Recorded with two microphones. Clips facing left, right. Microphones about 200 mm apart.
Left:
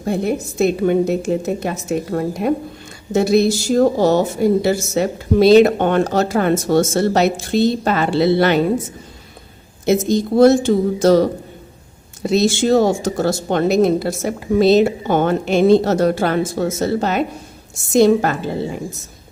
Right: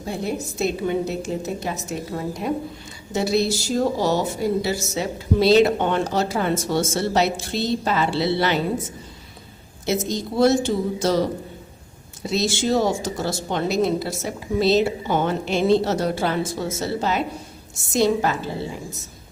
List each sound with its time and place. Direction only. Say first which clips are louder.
0.0 s a woman's voice: left 7 dB; 55° left (ahead or behind)
9.8 s a woman's voice: left 8 dB; 50° left (ahead or behind)